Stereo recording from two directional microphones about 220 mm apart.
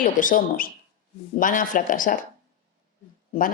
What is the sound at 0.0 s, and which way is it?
Speech, 40° left (ahead or behind).